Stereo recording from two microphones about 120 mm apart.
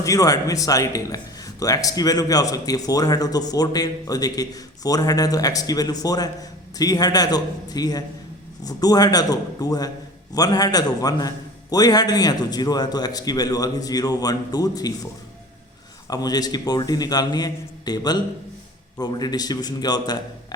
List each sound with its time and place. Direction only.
0.0 s a man's voice: 30° left (ahead or behind)
16.0 s a man's voice: 30° left (ahead or behind)